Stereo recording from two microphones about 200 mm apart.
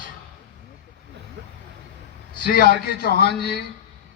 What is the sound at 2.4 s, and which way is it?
A man's voice, 45° left (ahead or behind).